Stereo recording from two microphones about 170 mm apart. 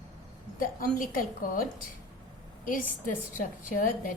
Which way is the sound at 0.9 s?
55° left (ahead or behind).